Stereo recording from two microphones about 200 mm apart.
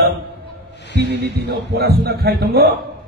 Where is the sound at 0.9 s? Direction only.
60° right (ahead or behind).